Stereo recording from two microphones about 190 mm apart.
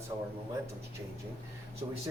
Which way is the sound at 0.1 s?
20° right (ahead or behind).